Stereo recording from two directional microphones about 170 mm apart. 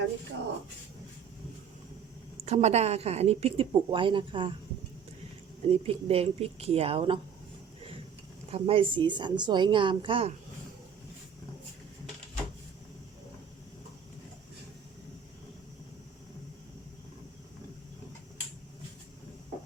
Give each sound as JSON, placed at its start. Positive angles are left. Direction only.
{"t": 2.5, "sound": "speech", "side_deg": -40}
{"t": 5.6, "sound": "speech", "side_deg": -35}
{"t": 8.5, "sound": "speech", "side_deg": -35}